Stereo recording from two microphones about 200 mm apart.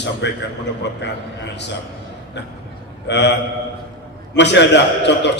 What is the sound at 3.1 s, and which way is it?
Mantra, 60° left (ahead or behind).